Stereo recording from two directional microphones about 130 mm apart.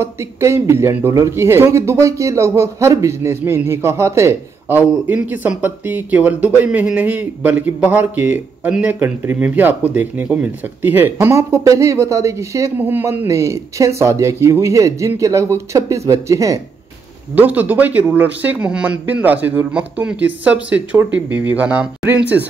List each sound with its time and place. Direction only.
0.0 s a man's voice: 20° right (ahead or behind)
17.4 s a man's voice: 10° right (ahead or behind)